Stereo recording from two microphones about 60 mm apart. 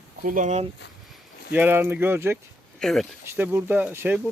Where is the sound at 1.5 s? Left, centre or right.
Right.